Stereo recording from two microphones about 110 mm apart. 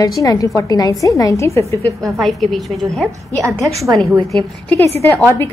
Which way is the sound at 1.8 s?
30° right (ahead or behind).